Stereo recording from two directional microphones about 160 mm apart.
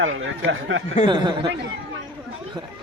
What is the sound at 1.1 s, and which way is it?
Speech, 30° right (ahead or behind).